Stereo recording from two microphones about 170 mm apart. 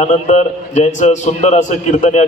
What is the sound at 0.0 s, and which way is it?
A man's voice, 45° left (ahead or behind).